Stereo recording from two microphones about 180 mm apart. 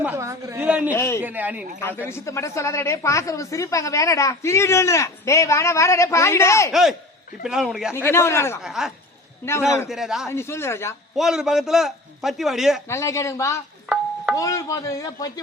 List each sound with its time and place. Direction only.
0.0 s a sound: 15° right (ahead or behind)
0.9 s speech: 15° left (ahead or behind)
1.2 s a man's voice: 10° right (ahead or behind)
2.0 s speech: 15° left (ahead or behind)
7.4 s a man's voice: centre (ahead or behind)
7.9 s speech: 15° left (ahead or behind)
8.6 s a man's voice: centre (ahead or behind)
9.5 s speech: 15° left (ahead or behind)
9.9 s a man's voice: centre (ahead or behind)
10.2 s speech: 15° left (ahead or behind)
11.2 s a man's voice: 5° right (ahead or behind)
12.9 s a man's voice: 15° left (ahead or behind)